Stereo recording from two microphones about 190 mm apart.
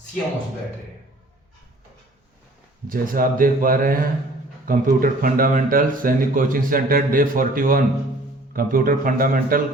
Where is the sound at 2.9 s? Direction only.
50° right (ahead or behind).